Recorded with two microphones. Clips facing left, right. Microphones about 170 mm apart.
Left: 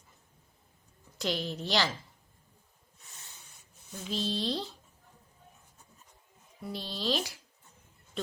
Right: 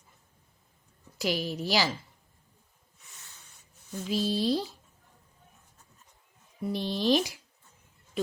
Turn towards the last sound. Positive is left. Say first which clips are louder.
# right 7 dB
turn(degrees=-15)  # may be behind; listen again after turning